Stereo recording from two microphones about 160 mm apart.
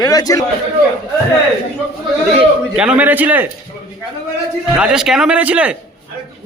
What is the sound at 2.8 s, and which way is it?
Speech, 10° right (ahead or behind).